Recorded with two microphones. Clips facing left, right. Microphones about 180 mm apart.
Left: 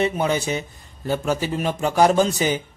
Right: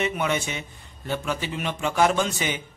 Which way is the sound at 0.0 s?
35° left (ahead or behind).